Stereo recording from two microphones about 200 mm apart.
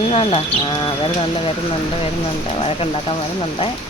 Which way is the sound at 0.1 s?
30° left (ahead or behind).